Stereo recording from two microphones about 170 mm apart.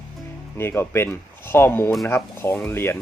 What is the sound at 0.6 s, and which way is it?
Speech, 15° left (ahead or behind).